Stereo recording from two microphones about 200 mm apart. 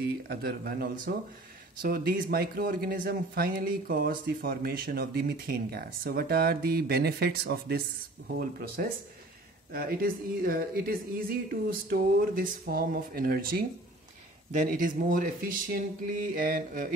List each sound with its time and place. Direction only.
0.0 s speech: 50° right (ahead or behind)